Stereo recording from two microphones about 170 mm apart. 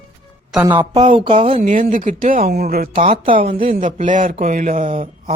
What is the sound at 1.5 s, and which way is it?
Speech, 50° right (ahead or behind).